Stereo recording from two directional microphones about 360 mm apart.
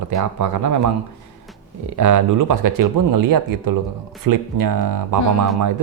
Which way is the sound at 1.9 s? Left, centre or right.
Right.